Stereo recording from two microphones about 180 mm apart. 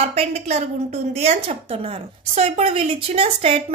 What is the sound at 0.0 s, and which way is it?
A woman's voice, 35° right (ahead or behind).